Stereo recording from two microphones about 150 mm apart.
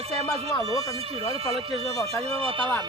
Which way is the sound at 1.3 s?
40° right (ahead or behind).